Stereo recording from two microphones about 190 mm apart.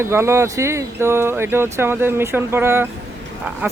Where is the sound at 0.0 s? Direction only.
15° right (ahead or behind).